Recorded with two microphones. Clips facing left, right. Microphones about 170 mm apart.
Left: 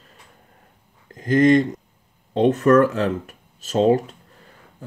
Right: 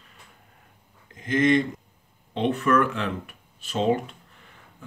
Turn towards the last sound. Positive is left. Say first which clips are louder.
# left 1 dB
turn(degrees=40)  # may be behind; listen again after turning